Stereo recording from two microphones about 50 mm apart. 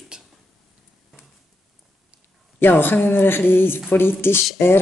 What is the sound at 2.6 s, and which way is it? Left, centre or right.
Speech, left.